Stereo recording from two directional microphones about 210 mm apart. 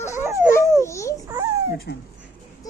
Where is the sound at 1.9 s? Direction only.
50° left (ahead or behind).